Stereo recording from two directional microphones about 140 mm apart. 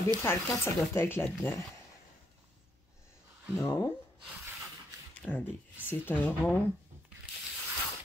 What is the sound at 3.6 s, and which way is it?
Speech, 20° left (ahead or behind).